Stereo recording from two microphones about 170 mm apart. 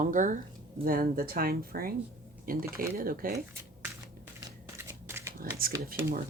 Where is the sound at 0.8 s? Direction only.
60° right (ahead or behind).